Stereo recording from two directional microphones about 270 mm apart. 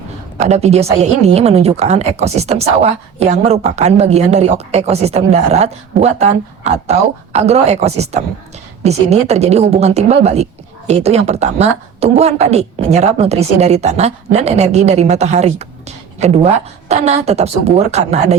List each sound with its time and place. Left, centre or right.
0.3 s a woman's voice: right